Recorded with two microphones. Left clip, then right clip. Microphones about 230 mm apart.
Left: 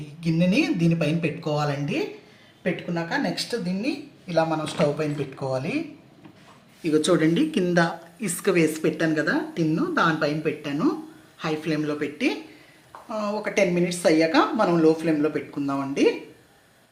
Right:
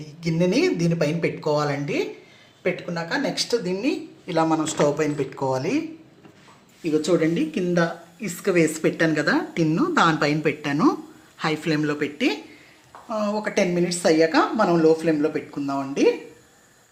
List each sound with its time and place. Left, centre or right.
0.2 s speech: right
6.8 s a woman's voice: centre
8.5 s speech: centre